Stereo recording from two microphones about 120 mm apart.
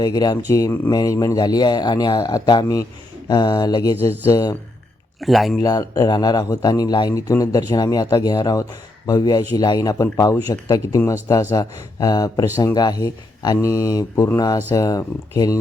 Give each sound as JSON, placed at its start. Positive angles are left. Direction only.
{"t": 0.0, "sound": "a man's voice", "side_deg": 35}
{"t": 5.2, "sound": "speech", "side_deg": 0}
{"t": 5.5, "sound": "a man's voice", "side_deg": 30}